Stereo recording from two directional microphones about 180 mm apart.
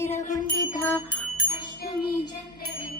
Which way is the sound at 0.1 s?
40° left (ahead or behind).